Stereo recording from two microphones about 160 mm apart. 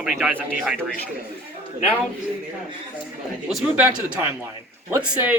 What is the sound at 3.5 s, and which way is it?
Speech, 5° right (ahead or behind).